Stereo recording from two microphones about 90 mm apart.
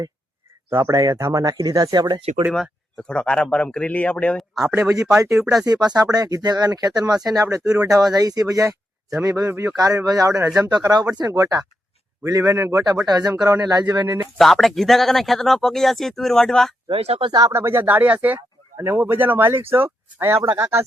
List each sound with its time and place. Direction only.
0.7 s speech: 40° right (ahead or behind)
3.0 s speech: 10° left (ahead or behind)
4.8 s speech: 35° right (ahead or behind)
5.4 s speech: centre (ahead or behind)
5.6 s speech: 50° right (ahead or behind)
9.5 s speech: 25° right (ahead or behind)
9.7 s speech: 45° right (ahead or behind)
10.7 s speech: 50° right (ahead or behind)
14.3 s speech: centre (ahead or behind)
16.9 s speech: 70° right (ahead or behind)
17.5 s speech: 25° right (ahead or behind)